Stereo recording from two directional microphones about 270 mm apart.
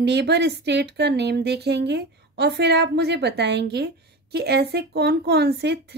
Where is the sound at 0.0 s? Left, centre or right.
Right.